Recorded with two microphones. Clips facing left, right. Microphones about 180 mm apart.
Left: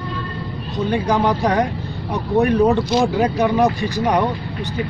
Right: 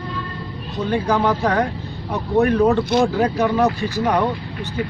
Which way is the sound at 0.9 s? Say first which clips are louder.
Even; 15° left (ahead or behind).